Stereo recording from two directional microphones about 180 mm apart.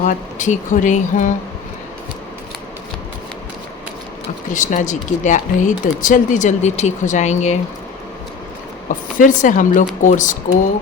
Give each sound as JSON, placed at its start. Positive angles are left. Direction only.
{"t": 0.0, "sound": "speech", "side_deg": 45}
{"t": 4.4, "sound": "speech", "side_deg": 45}
{"t": 9.1, "sound": "speech", "side_deg": 45}